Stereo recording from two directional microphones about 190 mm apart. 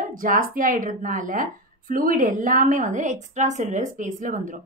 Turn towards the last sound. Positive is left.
turn(degrees=-40)  # may be behind; listen again after turning